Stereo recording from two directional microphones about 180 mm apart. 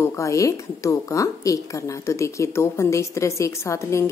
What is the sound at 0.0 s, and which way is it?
A woman's voice, 15° left (ahead or behind).